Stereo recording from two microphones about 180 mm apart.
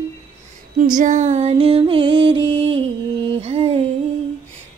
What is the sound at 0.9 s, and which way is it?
Music, 45° right (ahead or behind).